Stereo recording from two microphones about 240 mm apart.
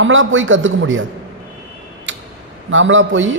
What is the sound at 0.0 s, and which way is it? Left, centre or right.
A man's voice, right.